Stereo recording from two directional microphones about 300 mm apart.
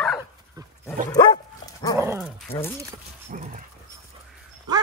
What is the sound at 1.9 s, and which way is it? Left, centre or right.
Dog, centre.